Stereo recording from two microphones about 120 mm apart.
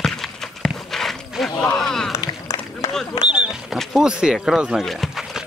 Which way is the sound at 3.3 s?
Centre (ahead or behind).